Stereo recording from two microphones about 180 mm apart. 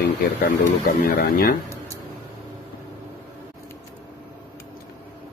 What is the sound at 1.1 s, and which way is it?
Speech, 60° left (ahead or behind).